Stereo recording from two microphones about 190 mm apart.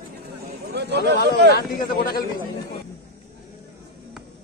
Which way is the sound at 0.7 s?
60° right (ahead or behind).